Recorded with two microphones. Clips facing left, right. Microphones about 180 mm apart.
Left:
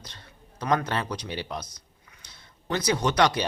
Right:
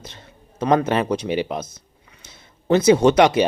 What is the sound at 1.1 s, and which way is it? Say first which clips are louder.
Speech: right 11 dB; 20° right (ahead or behind).